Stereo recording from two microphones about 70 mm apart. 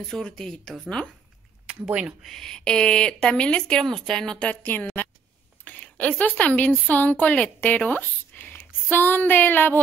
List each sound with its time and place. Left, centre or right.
0.1 s speech: centre
1.7 s speech: centre
2.2 s a woman's voice: centre; by 9.8 s left